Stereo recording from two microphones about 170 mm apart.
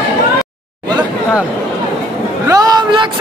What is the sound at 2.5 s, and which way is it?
Speech, 20° right (ahead or behind).